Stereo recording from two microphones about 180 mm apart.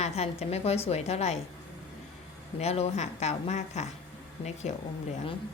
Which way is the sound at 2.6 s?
35° left (ahead or behind).